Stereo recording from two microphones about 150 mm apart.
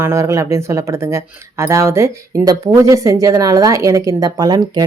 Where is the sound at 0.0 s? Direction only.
20° right (ahead or behind).